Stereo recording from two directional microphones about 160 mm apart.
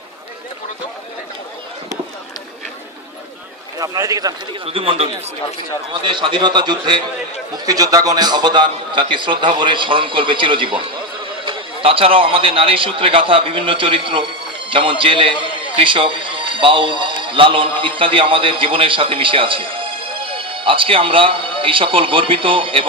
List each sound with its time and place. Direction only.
3.8 s a man's voice: 20° right (ahead or behind)
4.6 s a man's voice: 35° right (ahead or behind)